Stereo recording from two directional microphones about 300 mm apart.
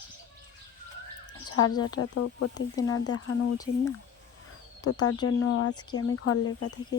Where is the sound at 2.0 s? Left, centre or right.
Left.